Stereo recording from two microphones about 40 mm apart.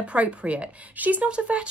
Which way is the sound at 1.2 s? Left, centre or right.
Right.